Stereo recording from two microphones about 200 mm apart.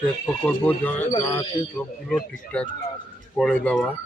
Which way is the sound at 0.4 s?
10° left (ahead or behind).